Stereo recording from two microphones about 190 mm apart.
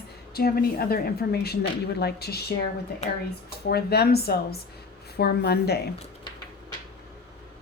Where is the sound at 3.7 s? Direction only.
55° left (ahead or behind).